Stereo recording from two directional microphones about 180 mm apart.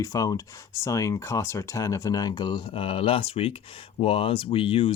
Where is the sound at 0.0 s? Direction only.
20° left (ahead or behind).